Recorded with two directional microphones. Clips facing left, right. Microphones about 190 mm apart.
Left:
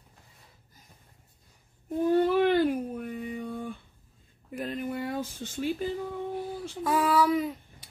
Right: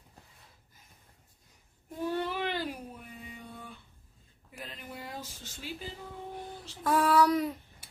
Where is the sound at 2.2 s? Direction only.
50° left (ahead or behind).